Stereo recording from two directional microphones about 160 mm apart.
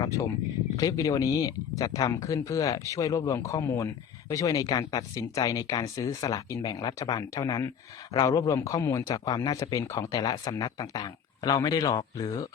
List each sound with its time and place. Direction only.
0.0 s speech: 20° left (ahead or behind)